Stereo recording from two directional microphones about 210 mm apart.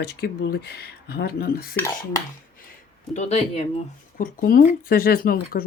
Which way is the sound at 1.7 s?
10° left (ahead or behind).